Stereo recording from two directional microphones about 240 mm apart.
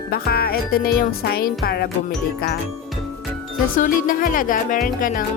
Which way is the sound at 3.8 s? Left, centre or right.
Left.